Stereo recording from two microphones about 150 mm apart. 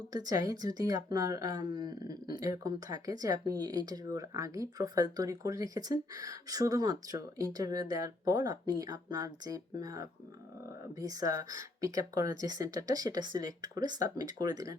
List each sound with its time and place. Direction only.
0.1 s speech: 25° right (ahead or behind)